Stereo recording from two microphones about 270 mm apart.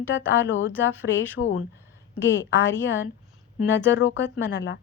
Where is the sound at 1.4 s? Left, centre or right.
Left.